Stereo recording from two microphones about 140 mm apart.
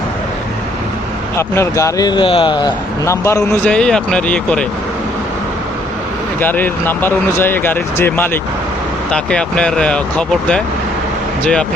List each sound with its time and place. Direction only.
1.4 s speech: 20° left (ahead or behind)
3.1 s speech: 20° left (ahead or behind)
6.4 s speech: 15° left (ahead or behind)